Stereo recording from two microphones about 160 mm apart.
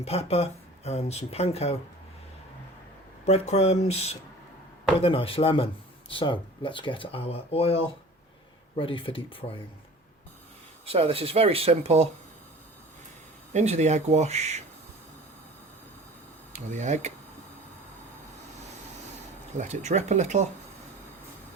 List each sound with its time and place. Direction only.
0.0 s speech: 40° left (ahead or behind)
3.2 s speech: 40° left (ahead or behind)
10.8 s speech: 35° right (ahead or behind)
13.5 s speech: 45° right (ahead or behind)
16.5 s speech: 45° right (ahead or behind)
19.5 s speech: 45° right (ahead or behind)